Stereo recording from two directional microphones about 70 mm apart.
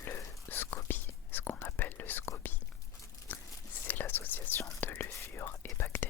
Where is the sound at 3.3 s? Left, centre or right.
Left.